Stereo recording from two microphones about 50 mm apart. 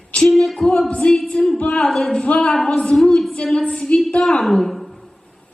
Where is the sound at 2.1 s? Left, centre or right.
Centre.